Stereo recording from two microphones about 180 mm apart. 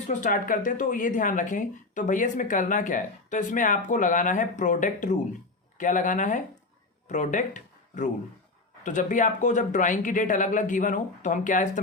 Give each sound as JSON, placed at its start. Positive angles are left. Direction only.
{"t": 0.1, "sound": "speech", "side_deg": 45}